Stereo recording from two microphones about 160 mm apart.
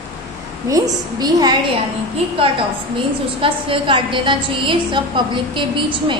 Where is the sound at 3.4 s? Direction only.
30° right (ahead or behind).